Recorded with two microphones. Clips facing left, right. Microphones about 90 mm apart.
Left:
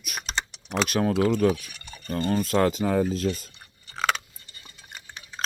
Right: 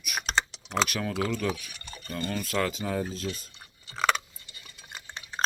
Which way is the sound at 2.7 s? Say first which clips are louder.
Left 7 dB; 50° left (ahead or behind).